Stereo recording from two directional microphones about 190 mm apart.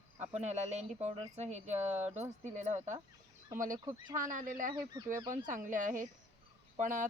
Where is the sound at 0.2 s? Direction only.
35° right (ahead or behind).